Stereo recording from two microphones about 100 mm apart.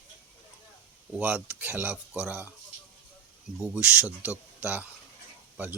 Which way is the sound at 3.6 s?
10° right (ahead or behind).